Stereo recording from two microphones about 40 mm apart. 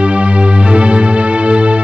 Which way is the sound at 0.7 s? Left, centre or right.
Right.